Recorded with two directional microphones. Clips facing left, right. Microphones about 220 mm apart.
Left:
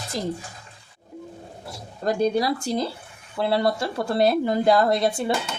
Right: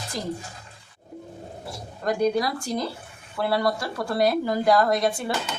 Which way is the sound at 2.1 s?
25° left (ahead or behind).